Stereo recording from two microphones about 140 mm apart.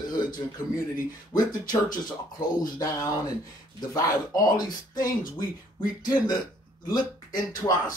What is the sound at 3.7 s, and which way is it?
Speech, 25° left (ahead or behind).